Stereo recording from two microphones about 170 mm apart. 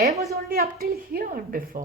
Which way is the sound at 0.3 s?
60° right (ahead or behind).